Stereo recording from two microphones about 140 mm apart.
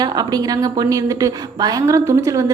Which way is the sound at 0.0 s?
30° right (ahead or behind).